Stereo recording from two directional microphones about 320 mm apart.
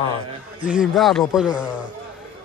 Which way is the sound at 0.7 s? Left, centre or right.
Centre.